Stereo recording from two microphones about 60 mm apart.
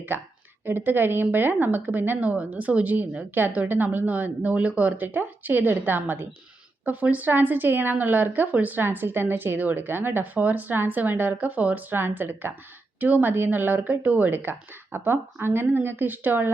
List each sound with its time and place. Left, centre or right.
0.1 s speech: right
11.9 s speech: right